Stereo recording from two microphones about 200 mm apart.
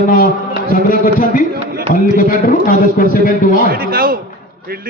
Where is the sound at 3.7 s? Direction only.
45° right (ahead or behind).